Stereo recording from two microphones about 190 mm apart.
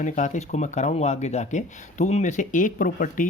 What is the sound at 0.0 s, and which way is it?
Speech, 40° left (ahead or behind).